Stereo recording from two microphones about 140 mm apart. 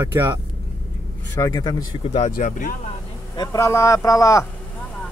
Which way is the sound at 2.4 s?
70° left (ahead or behind).